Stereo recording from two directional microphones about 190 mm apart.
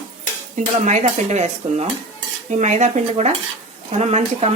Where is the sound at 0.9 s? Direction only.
40° right (ahead or behind).